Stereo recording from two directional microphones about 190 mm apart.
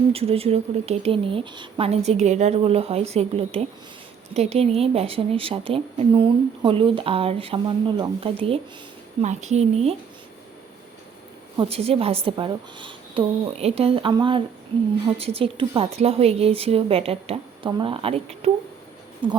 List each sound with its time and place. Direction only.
0.1 s a woman's voice: 30° right (ahead or behind)
11.7 s a woman's voice: 30° right (ahead or behind)